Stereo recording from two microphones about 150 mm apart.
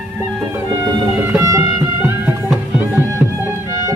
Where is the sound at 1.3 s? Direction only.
20° right (ahead or behind).